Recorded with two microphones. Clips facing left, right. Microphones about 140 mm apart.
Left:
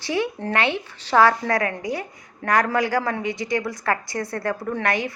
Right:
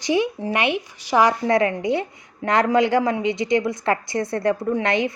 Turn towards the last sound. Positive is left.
turn(degrees=-20)  # may be behind; listen again after turning